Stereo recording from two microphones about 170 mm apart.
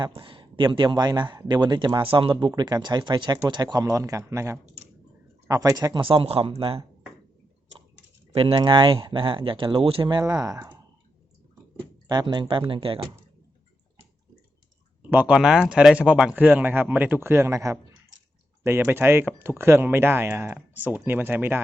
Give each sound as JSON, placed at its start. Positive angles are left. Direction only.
{"t": 0.1, "sound": "speech", "side_deg": -30}
{"t": 8.3, "sound": "speech", "side_deg": -35}
{"t": 12.0, "sound": "speech", "side_deg": -25}
{"t": 15.1, "sound": "speech", "side_deg": -5}